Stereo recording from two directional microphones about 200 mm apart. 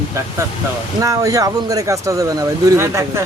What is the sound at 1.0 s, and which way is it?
Speech, 15° right (ahead or behind).